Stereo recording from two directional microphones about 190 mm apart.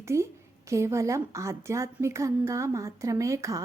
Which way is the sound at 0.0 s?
15° right (ahead or behind).